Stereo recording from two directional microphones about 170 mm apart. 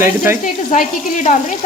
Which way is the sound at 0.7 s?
45° left (ahead or behind).